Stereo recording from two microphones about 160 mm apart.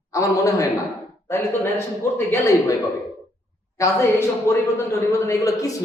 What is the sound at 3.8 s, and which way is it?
A man's voice, 20° left (ahead or behind).